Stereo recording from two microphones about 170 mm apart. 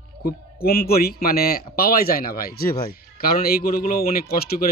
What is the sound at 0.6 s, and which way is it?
Speech, 65° left (ahead or behind).